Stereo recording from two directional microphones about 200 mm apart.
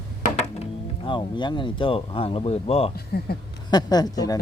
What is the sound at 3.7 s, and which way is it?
Speech, 20° left (ahead or behind).